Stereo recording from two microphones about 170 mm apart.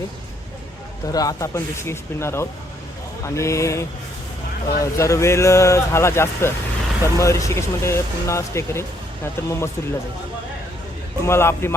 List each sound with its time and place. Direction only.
1.0 s speech: 20° left (ahead or behind)
11.3 s speech: 15° left (ahead or behind)